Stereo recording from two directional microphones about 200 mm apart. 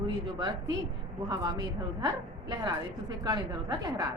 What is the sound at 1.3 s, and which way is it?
A woman's voice, 20° right (ahead or behind).